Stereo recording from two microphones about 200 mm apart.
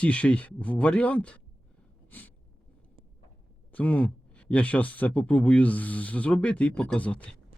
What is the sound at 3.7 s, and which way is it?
Speech, 5° left (ahead or behind).